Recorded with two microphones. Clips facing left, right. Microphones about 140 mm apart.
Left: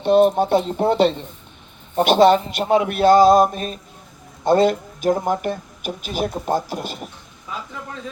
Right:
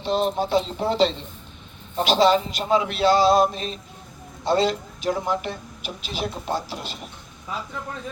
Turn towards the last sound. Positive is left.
turn(degrees=50)  # may be behind; listen again after turning